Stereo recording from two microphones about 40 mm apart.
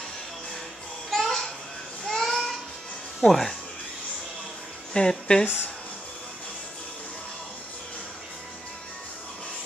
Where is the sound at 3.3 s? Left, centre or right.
Centre.